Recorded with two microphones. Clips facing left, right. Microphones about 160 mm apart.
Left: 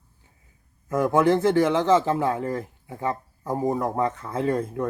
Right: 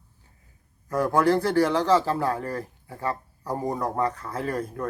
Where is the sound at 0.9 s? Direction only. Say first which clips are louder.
Left 2 dB; 20° left (ahead or behind).